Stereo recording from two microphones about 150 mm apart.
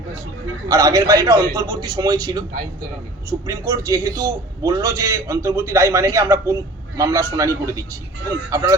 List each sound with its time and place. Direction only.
0.7 s a man's voice: 25° right (ahead or behind)